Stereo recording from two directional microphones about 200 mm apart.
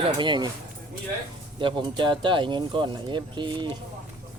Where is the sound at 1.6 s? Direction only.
25° right (ahead or behind).